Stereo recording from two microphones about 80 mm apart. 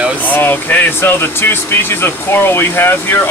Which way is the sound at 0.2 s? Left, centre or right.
Left.